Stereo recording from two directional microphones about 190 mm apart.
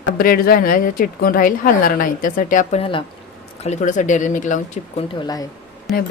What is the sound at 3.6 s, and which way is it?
Speech, 40° left (ahead or behind).